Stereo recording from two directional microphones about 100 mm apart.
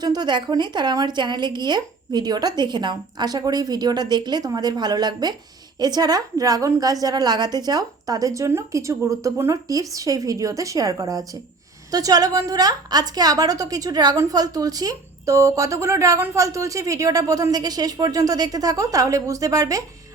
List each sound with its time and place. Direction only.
0.0 s a woman's voice: 45° right (ahead or behind)